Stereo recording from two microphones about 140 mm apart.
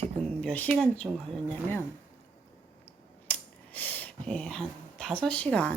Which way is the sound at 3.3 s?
10° left (ahead or behind).